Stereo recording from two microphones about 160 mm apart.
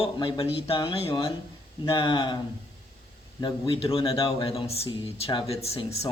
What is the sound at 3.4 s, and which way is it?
Speech, 35° left (ahead or behind).